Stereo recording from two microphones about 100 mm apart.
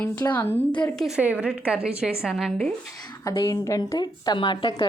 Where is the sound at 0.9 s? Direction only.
Centre (ahead or behind).